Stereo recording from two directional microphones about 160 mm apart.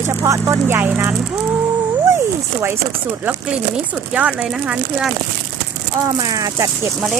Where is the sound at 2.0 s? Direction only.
15° right (ahead or behind).